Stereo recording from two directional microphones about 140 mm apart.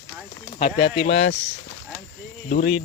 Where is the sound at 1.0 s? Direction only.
50° left (ahead or behind).